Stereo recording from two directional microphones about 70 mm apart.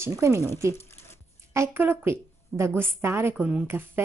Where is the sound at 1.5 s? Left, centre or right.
Right.